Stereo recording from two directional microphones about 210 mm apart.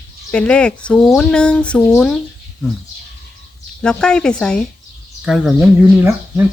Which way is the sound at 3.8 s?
5° left (ahead or behind).